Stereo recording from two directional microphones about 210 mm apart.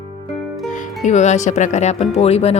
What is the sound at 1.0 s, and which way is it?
Speech, 35° left (ahead or behind).